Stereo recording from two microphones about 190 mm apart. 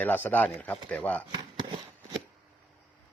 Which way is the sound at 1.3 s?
25° right (ahead or behind).